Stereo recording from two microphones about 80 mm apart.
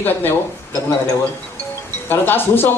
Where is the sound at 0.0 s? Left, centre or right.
Left.